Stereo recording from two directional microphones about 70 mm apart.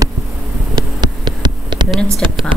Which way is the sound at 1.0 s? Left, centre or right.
Right.